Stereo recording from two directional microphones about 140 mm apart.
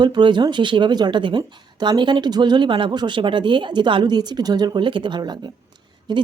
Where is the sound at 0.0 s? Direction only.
35° right (ahead or behind).